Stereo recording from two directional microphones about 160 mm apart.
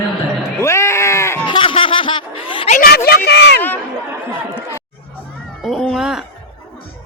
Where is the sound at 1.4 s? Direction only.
30° left (ahead or behind).